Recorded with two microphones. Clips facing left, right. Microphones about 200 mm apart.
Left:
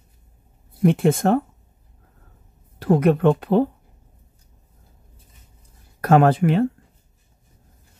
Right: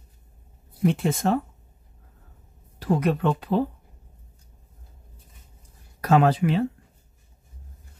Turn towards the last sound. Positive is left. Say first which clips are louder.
# left 4 dB
turn(degrees=50)  # may be behind; listen again after turning